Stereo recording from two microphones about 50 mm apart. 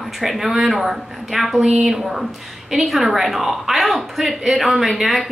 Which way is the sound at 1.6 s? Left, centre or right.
Centre.